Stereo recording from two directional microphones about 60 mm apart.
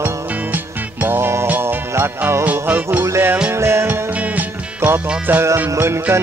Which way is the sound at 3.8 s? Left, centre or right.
Right.